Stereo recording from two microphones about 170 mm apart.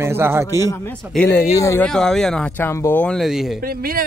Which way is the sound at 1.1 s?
10° left (ahead or behind).